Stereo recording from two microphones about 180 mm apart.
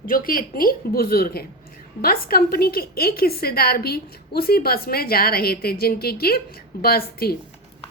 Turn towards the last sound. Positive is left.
turn(degrees=60)  # may be behind; listen again after turning